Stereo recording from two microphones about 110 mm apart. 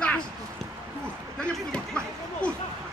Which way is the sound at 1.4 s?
10° left (ahead or behind).